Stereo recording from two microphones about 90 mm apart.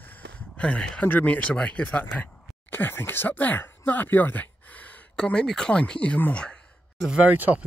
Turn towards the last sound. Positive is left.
turn(degrees=-20)  # may be behind; listen again after turning